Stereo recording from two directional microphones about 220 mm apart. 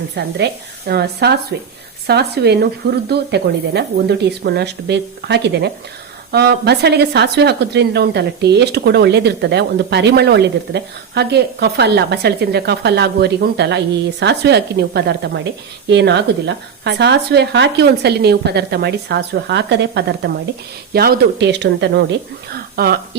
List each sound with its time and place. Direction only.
0.2 s a woman's voice: 50° right (ahead or behind)